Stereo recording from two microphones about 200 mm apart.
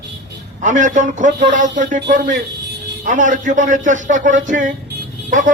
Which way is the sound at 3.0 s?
40° right (ahead or behind).